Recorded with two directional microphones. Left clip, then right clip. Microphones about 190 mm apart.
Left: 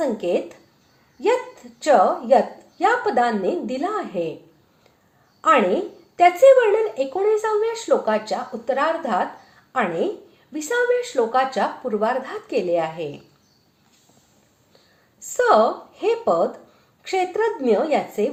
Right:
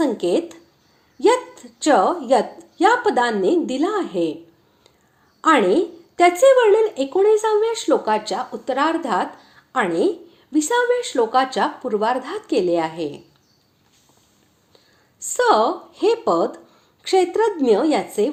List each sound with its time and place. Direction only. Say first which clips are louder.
0.0 s speech: right 2 dB; 30° right (ahead or behind)
1.8 s speech: even; 30° right (ahead or behind)
5.4 s a woman's voice: right 2 dB; 30° right (ahead or behind)
15.3 s a woman's voice: even; 30° right (ahead or behind)